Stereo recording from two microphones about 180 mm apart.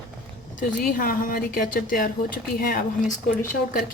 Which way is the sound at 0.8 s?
50° left (ahead or behind).